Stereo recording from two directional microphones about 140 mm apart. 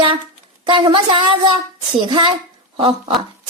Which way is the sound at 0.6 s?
35° right (ahead or behind).